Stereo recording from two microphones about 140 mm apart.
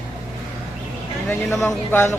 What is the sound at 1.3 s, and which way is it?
Speech, 20° left (ahead or behind).